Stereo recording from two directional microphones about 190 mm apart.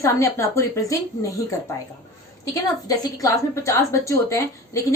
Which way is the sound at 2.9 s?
20° left (ahead or behind).